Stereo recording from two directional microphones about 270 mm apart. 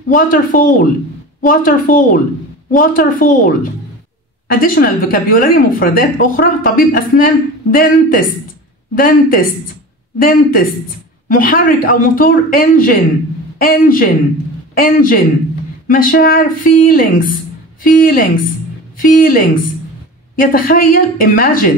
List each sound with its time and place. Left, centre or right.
0.1 s a woman's voice: left
4.5 s speech: left